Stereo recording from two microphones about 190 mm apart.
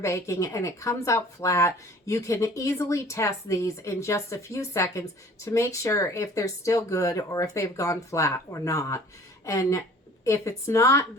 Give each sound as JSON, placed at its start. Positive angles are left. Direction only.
{"t": 0.0, "sound": "speech", "side_deg": 15}